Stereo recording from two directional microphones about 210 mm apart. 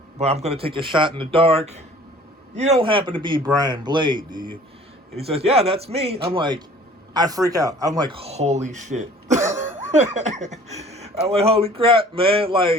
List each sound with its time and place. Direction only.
0.2 s speech: 30° right (ahead or behind)